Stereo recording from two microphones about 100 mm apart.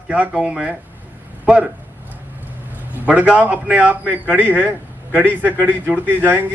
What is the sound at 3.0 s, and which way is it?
Speech, 15° right (ahead or behind).